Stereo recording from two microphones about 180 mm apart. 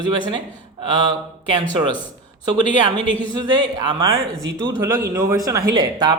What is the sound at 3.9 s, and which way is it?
A man's voice, 20° right (ahead or behind).